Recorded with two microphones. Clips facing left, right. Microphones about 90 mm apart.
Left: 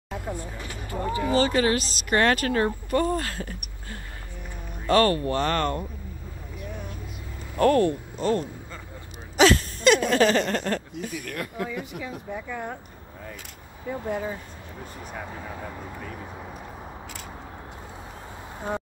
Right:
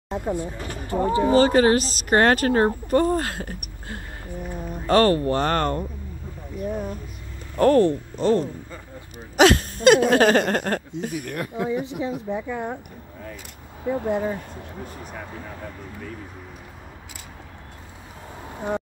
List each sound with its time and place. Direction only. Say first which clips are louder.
0.1 s a sound: right 7 dB; 25° right (ahead or behind)
0.6 s speech: right 4 dB; 40° right (ahead or behind)
0.9 s speech: right 6 dB; 30° right (ahead or behind)
6.6 s a sound: right 10 dB; 40° right (ahead or behind)
7.5 s speech: right 3 dB; 35° right (ahead or behind)
9.4 s a sound: right 3 dB; 40° right (ahead or behind)
10.9 s speech: right 4 dB; 30° right (ahead or behind)
12.3 s speech: right 5 dB; 15° right (ahead or behind)
13.8 s speech: right 6 dB; 20° right (ahead or behind)
15.1 s speech: left 2 dB; 5° left (ahead or behind)